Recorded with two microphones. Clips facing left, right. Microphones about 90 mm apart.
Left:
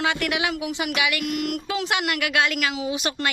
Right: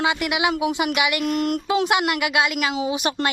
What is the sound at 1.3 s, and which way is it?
Speech, 35° right (ahead or behind).